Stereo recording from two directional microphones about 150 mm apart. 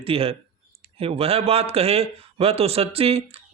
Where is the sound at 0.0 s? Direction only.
40° right (ahead or behind).